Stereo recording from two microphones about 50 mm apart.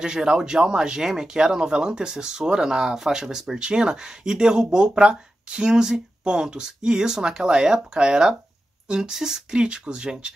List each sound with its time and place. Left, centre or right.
0.0 s speech: centre